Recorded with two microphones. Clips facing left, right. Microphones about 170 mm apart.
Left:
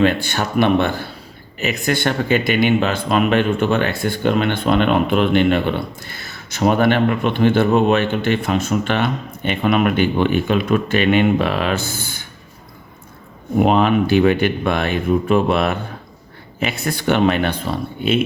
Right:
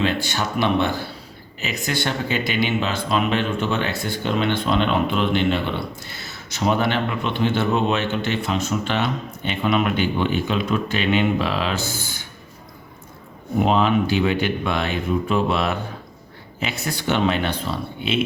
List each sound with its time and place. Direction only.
0.0 s speech: 55° left (ahead or behind)
13.6 s speech: 55° left (ahead or behind)